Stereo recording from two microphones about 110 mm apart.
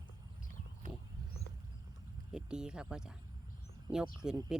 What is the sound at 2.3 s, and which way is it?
Speech, 10° right (ahead or behind).